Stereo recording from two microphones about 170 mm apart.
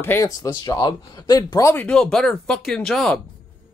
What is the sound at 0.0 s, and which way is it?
Speech, 15° left (ahead or behind).